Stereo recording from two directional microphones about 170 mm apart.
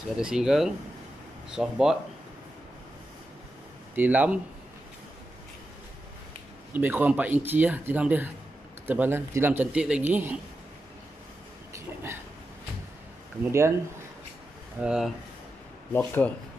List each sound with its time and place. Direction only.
0.2 s speech: 5° right (ahead or behind)
3.9 s speech: 10° right (ahead or behind)
6.7 s speech: 10° right (ahead or behind)
11.7 s a sound: 15° right (ahead or behind)
13.4 s speech: 15° right (ahead or behind)
14.8 s speech: 5° right (ahead or behind)
15.9 s speech: 10° left (ahead or behind)